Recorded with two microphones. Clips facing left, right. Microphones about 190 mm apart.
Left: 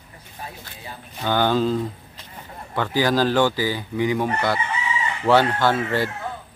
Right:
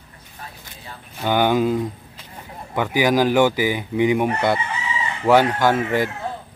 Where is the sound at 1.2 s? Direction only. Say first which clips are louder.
Right 2 dB; 15° right (ahead or behind).